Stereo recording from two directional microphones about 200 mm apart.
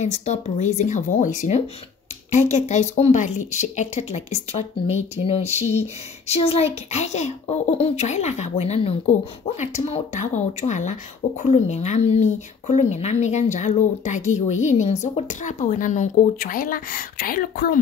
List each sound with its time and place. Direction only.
0.0 s speech: 35° left (ahead or behind)